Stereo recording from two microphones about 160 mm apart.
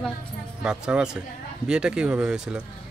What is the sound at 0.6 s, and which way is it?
Speech, 5° right (ahead or behind).